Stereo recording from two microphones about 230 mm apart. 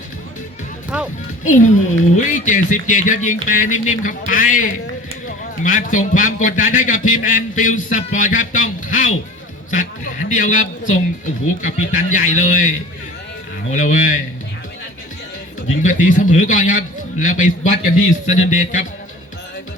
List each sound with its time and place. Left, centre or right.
0.9 s speech: centre
1.5 s a man's voice: left
15.7 s a man's voice: left